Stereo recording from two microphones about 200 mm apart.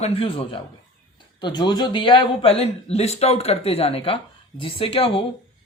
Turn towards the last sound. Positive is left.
turn(degrees=25)  # may be behind; listen again after turning